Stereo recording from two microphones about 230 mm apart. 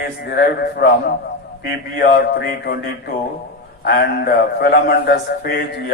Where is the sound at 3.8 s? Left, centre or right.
Left.